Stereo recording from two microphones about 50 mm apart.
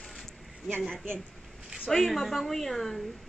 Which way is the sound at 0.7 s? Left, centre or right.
Centre.